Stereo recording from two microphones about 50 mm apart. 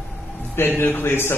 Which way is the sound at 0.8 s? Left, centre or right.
Left.